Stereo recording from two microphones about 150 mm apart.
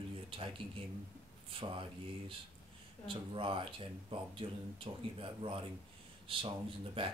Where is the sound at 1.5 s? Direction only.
35° right (ahead or behind).